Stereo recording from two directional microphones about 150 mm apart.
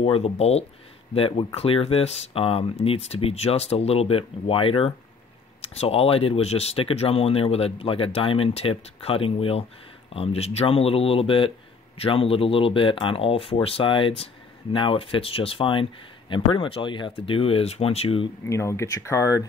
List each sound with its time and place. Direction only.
0.0 s speech: 40° left (ahead or behind)
18.4 s speech: 20° left (ahead or behind)